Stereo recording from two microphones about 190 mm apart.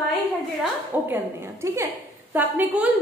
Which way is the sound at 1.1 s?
15° right (ahead or behind).